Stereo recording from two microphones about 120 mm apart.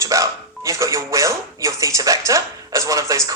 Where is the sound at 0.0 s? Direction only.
25° right (ahead or behind).